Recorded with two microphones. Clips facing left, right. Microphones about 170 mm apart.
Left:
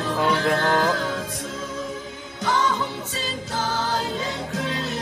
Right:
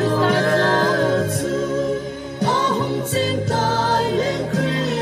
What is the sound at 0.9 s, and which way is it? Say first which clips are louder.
Music: right 9 dB; 50° right (ahead or behind).